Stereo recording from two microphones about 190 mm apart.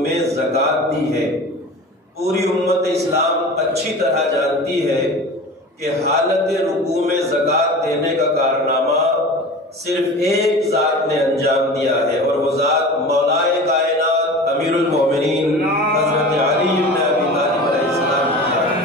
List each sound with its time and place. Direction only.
2.2 s a man's voice: 35° right (ahead or behind)
6.9 s a man's voice: 35° right (ahead or behind)
8.0 s a man's voice: 55° right (ahead or behind)
10.2 s a man's voice: 35° right (ahead or behind)
13.9 s a sound: 55° right (ahead or behind)